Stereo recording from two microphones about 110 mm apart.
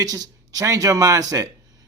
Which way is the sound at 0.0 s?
35° right (ahead or behind).